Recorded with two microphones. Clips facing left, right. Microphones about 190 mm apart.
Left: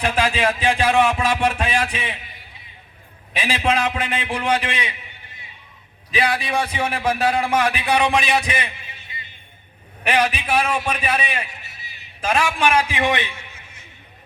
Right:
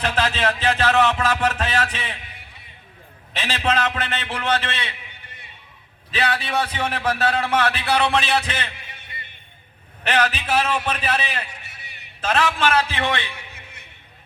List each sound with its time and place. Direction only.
0.0 s a man's voice: 10° left (ahead or behind)
3.3 s a man's voice: 10° left (ahead or behind)
6.1 s a man's voice: 10° left (ahead or behind)
10.0 s a man's voice: 10° left (ahead or behind)
13.3 s a sound: 60° right (ahead or behind)